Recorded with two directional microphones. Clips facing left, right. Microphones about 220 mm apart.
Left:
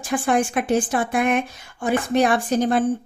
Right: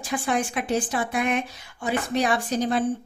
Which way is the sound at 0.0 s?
50° left (ahead or behind).